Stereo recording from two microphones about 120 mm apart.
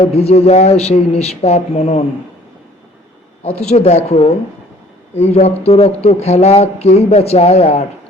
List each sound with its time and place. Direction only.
0.0 s speech: 60° left (ahead or behind)
3.6 s speech: 65° left (ahead or behind)